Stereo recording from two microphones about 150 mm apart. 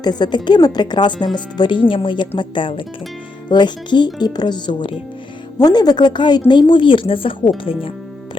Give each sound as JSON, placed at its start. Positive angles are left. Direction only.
{"t": 0.0, "sound": "speech", "side_deg": 30}